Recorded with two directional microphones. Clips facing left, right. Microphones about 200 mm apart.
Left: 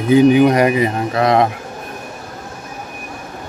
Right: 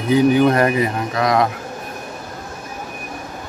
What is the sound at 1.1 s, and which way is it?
Speech, 25° left (ahead or behind).